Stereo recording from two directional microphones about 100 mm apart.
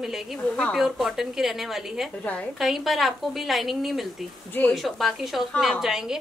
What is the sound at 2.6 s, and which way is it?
A woman's voice, centre (ahead or behind).